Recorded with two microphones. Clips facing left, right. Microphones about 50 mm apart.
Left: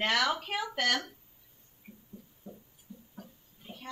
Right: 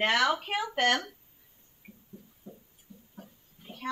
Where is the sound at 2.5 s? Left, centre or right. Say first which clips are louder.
Even; left.